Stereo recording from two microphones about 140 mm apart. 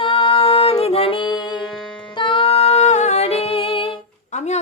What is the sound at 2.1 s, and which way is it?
Music, 35° left (ahead or behind).